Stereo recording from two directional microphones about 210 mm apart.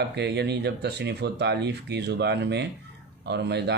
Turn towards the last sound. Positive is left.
turn(degrees=-50)  # may be behind; listen again after turning